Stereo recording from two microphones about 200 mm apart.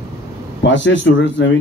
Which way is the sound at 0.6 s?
65° left (ahead or behind).